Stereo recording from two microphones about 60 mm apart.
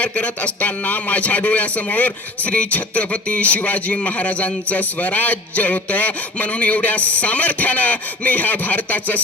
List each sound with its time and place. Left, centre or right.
0.0 s a man's voice: left